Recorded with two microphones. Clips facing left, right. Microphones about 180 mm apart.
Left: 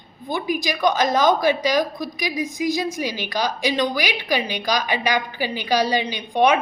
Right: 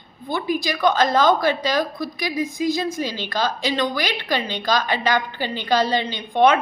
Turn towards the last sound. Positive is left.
turn(degrees=15)  # may be behind; listen again after turning